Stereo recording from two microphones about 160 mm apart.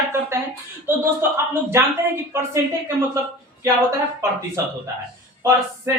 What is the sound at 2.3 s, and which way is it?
Speech, 15° right (ahead or behind).